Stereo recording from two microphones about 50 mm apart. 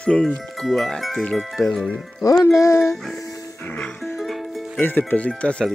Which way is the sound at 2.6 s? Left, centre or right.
Left.